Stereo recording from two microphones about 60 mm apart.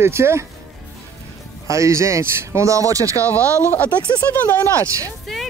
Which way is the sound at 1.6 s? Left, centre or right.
Right.